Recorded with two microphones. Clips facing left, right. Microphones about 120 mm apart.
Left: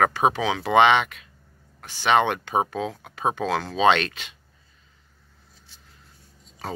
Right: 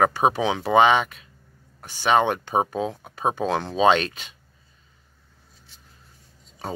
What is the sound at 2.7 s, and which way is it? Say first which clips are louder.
Speech: right 2 dB; 15° right (ahead or behind).